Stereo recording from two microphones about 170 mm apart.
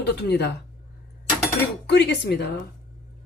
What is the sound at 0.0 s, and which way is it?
Speech, 75° left (ahead or behind).